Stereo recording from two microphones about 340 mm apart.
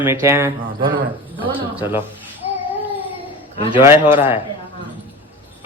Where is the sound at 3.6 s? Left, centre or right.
Centre.